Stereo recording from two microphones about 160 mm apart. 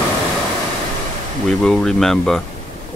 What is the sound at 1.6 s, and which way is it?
Speech, 5° left (ahead or behind).